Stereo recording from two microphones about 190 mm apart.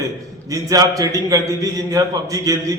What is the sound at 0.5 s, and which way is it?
A man's voice, 20° right (ahead or behind).